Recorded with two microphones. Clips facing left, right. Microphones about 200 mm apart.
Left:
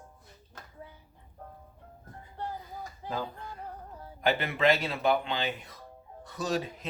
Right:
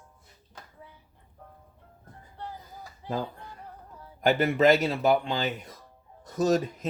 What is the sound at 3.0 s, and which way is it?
Speech, 45° left (ahead or behind).